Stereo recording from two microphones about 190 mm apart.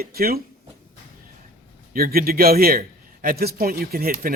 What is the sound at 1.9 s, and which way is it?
A man's voice, 50° right (ahead or behind).